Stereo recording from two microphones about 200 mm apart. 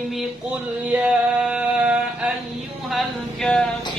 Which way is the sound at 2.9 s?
Centre (ahead or behind).